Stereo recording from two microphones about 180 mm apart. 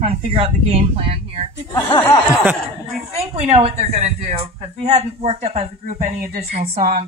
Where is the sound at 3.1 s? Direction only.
35° right (ahead or behind).